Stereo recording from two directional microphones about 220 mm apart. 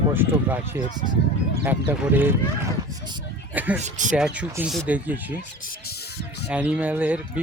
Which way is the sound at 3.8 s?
35° right (ahead or behind).